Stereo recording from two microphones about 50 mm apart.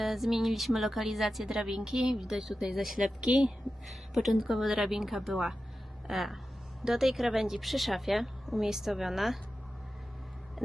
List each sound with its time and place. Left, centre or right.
0.0 s a woman's voice: centre
3.2 s speech: centre
3.8 s a woman's voice: centre